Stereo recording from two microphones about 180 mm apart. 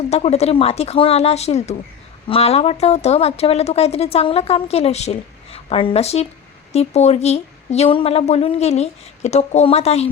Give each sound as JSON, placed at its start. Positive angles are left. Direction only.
{"t": 0.1, "sound": "a woman's voice", "side_deg": 35}